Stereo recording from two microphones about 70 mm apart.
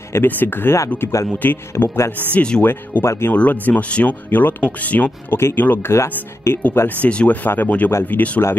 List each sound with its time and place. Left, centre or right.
0.1 s speech: left
2.3 s speech: centre
2.6 s speech: left
3.3 s speech: left
7.0 s speech: centre